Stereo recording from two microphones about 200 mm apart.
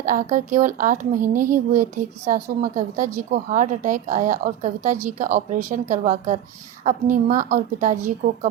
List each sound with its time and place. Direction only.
0.0 s a woman's voice: 45° right (ahead or behind)